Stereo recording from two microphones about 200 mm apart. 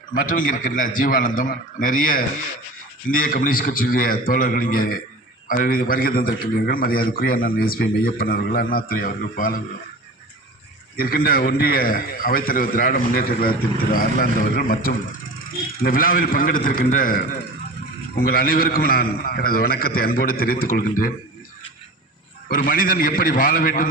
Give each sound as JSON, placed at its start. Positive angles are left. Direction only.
{"t": 0.1, "sound": "a man's voice", "side_deg": 45}
{"t": 10.9, "sound": "a man's voice", "side_deg": 50}
{"t": 22.4, "sound": "a man's voice", "side_deg": 45}